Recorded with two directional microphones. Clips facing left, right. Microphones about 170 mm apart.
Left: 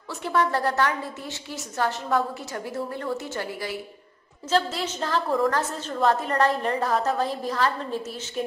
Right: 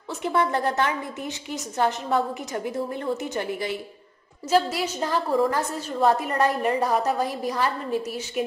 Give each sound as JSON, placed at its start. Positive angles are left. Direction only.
{"t": 0.1, "sound": "a woman's voice", "side_deg": -20}
{"t": 4.5, "sound": "a woman's voice", "side_deg": -10}